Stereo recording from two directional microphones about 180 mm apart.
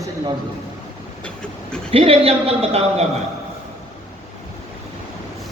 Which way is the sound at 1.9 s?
30° right (ahead or behind).